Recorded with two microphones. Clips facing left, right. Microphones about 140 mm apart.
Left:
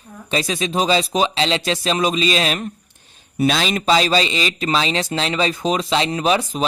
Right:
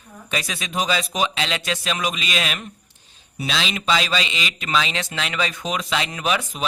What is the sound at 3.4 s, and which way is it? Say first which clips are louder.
Speech: left 8 dB; 45° left (ahead or behind).